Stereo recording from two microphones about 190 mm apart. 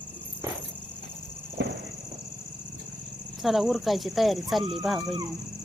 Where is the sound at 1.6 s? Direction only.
65° right (ahead or behind).